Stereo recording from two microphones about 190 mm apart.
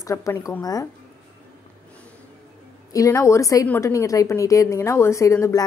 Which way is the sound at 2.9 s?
15° left (ahead or behind).